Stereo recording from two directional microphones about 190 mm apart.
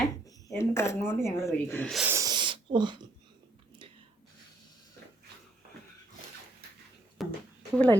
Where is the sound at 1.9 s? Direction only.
Centre (ahead or behind).